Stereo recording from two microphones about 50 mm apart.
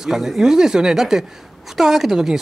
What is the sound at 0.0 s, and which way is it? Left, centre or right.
Speech, centre.